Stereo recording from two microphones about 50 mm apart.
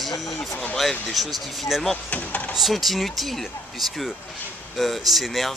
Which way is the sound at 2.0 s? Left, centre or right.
Left.